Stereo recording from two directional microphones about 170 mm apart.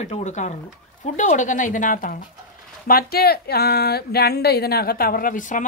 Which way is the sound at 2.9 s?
65° left (ahead or behind).